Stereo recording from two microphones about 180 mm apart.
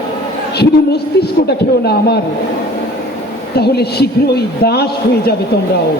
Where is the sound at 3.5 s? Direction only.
65° left (ahead or behind).